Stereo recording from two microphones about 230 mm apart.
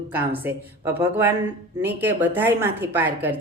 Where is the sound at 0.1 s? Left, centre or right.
Centre.